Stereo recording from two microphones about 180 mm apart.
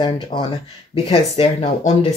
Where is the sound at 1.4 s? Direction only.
35° left (ahead or behind).